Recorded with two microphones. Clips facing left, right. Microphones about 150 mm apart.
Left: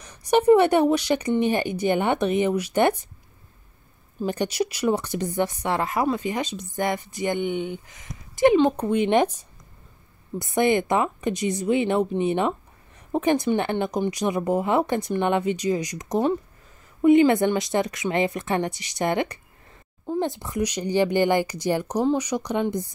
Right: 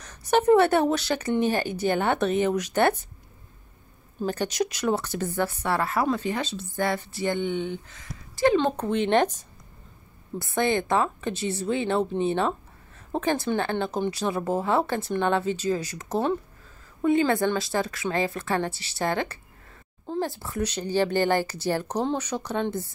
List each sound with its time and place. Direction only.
0.0 s speech: 10° left (ahead or behind)
4.3 s speech: 10° left (ahead or behind)